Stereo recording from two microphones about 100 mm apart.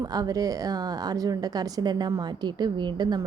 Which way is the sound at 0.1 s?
40° right (ahead or behind).